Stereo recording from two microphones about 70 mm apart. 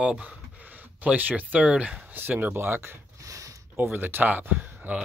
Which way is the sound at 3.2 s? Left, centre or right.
Right.